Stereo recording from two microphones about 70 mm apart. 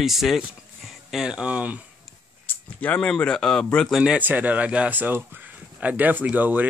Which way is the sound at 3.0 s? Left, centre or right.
Centre.